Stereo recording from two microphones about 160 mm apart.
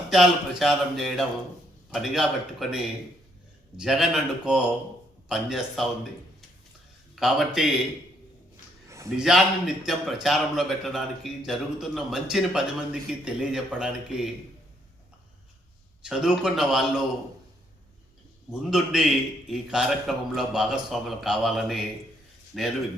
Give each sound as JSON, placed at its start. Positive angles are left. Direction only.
{"t": 0.1, "sound": "a man's voice", "side_deg": 0}
{"t": 7.2, "sound": "a man's voice", "side_deg": 0}
{"t": 8.9, "sound": "a sound", "side_deg": -20}
{"t": 9.1, "sound": "a man's voice", "side_deg": -5}
{"t": 16.0, "sound": "a man's voice", "side_deg": -5}
{"t": 18.7, "sound": "a man's voice", "side_deg": -5}